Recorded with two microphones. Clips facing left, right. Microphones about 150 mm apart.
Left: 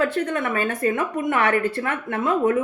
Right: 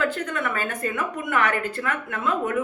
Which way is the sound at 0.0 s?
30° left (ahead or behind).